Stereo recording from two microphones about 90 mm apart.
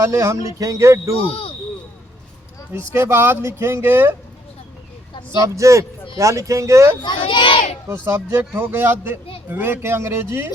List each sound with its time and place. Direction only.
0.0 s speech: 35° right (ahead or behind)
1.2 s speech: 90° left
2.7 s speech: 25° right (ahead or behind)
5.4 s speech: 35° right (ahead or behind)
7.0 s a child's voice: 65° left (ahead or behind)
8.0 s speech: 30° right (ahead or behind)